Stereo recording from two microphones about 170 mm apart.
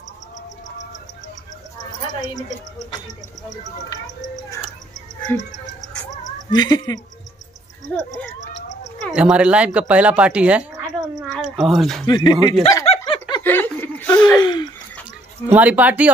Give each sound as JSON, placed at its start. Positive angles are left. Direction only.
{"t": 3.9, "sound": "speech", "side_deg": 20}
{"t": 5.3, "sound": "music", "side_deg": 10}
{"t": 6.5, "sound": "speech", "side_deg": 25}
{"t": 9.1, "sound": "speech", "side_deg": -5}
{"t": 12.1, "sound": "speech", "side_deg": 25}
{"t": 12.8, "sound": "snicker", "side_deg": 35}
{"t": 13.4, "sound": "snicker", "side_deg": 10}
{"t": 14.0, "sound": "gasp", "side_deg": 25}
{"t": 14.4, "sound": "a sound", "side_deg": 25}
{"t": 15.4, "sound": "speech", "side_deg": -10}